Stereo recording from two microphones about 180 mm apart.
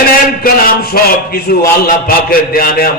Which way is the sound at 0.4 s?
55° left (ahead or behind).